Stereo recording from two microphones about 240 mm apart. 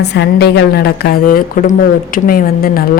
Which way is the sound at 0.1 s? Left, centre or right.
Left.